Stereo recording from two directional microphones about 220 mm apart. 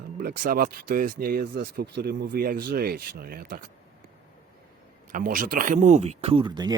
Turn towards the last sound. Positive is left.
turn(degrees=-20)  # may be behind; listen again after turning